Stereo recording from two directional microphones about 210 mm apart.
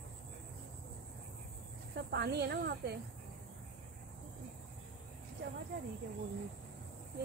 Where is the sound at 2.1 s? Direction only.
50° right (ahead or behind).